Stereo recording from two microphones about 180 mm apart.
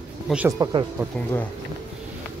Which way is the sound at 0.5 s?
20° right (ahead or behind).